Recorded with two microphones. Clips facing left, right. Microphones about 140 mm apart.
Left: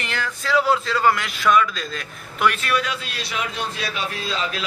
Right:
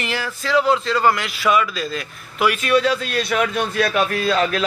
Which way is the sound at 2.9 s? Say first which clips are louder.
Right 9 dB; 50° right (ahead or behind).